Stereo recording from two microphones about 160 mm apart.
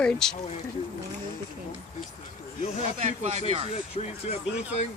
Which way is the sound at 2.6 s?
45° left (ahead or behind).